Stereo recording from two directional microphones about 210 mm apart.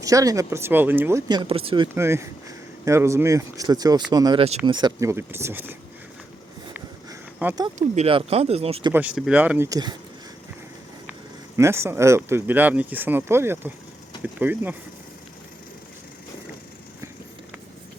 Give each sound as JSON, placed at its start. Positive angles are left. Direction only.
{"t": 0.0, "sound": "speech", "side_deg": -15}
{"t": 2.0, "sound": "speech", "side_deg": -10}
{"t": 6.7, "sound": "a sound", "side_deg": -10}
{"t": 7.8, "sound": "speech", "side_deg": -30}
{"t": 8.9, "sound": "speech", "side_deg": -5}
{"t": 11.5, "sound": "speech", "side_deg": -15}